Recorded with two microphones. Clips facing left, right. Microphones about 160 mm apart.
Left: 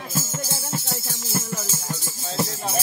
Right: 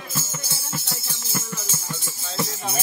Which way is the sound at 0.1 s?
45° left (ahead or behind).